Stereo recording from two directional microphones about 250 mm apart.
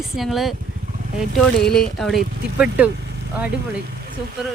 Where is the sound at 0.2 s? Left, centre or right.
Centre.